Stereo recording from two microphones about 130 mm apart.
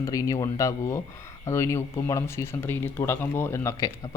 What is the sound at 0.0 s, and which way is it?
Speech, 25° left (ahead or behind).